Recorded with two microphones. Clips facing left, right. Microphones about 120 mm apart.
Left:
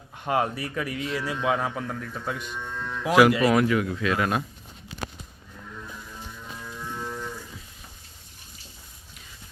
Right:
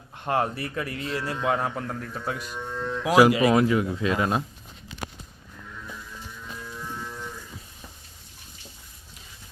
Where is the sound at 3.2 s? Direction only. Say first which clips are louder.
Right 1 dB; 10° right (ahead or behind).